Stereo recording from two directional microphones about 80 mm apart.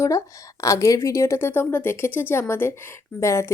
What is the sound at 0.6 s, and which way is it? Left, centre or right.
A woman's voice, left.